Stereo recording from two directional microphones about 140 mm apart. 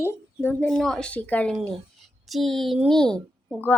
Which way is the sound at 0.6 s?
5° left (ahead or behind).